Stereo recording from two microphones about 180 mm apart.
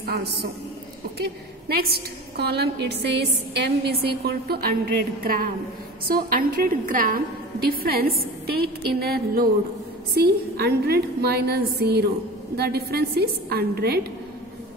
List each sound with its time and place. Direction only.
0.0 s a man's voice: 60° right (ahead or behind)